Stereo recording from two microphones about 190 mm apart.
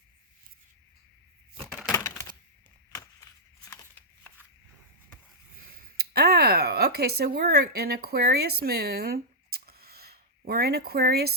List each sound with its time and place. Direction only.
1.6 s a sound: 10° right (ahead or behind)
1.9 s typewriter: 15° left (ahead or behind)
6.0 s speech: 55° right (ahead or behind)